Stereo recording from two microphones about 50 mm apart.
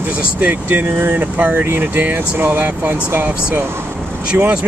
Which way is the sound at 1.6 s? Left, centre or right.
Right.